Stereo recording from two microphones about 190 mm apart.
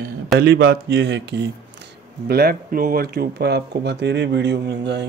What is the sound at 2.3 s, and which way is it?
Speech, 55° right (ahead or behind).